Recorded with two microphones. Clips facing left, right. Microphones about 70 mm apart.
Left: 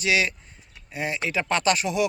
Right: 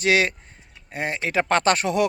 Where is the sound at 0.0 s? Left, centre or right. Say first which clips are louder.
Right 4 dB; right.